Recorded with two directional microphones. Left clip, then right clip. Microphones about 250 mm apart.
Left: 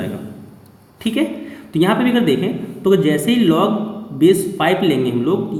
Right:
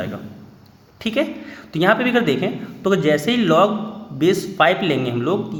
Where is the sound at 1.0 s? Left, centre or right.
Right.